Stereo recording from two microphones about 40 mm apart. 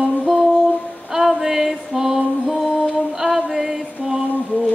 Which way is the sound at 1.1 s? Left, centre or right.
Centre.